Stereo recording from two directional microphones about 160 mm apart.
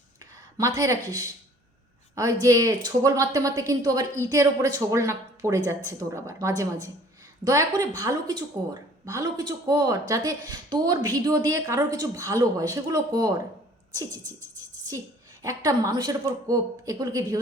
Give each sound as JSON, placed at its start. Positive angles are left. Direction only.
{"t": 0.5, "sound": "a woman's voice", "side_deg": -20}
{"t": 13.9, "sound": "beatboxing", "side_deg": -20}
{"t": 14.8, "sound": "a woman's voice", "side_deg": -20}